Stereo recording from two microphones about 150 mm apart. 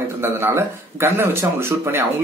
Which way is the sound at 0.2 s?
15° right (ahead or behind).